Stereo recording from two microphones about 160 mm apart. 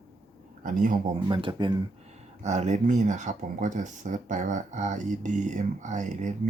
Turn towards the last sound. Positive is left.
turn(degrees=-50)  # may be behind; listen again after turning